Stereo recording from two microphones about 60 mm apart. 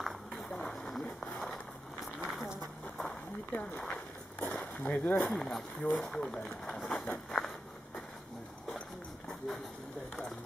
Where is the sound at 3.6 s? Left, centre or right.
Centre.